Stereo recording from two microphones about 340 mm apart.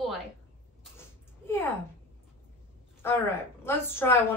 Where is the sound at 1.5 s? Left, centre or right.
Centre.